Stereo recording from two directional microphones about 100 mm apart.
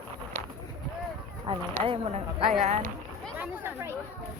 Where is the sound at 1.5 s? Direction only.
50° right (ahead or behind).